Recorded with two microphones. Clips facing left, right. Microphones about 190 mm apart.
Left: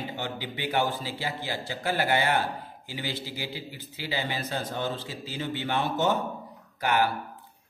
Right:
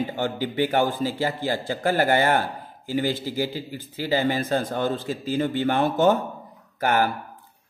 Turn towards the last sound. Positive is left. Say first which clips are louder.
# right 3 dB
turn(degrees=-45)  # may be behind; listen again after turning